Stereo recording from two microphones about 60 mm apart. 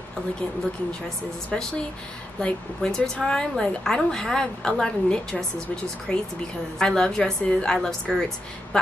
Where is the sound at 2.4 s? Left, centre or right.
Centre.